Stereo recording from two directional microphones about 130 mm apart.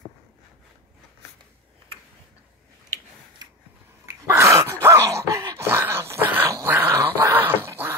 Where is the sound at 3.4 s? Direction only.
30° right (ahead or behind).